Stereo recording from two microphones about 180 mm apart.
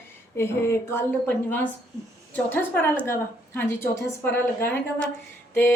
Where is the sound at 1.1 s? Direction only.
10° left (ahead or behind).